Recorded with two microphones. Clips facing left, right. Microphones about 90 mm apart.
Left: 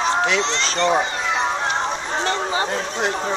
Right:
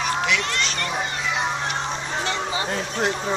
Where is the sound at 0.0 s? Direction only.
30° left (ahead or behind).